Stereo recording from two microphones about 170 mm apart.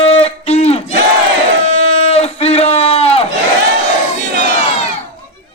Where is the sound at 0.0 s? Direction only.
40° left (ahead or behind).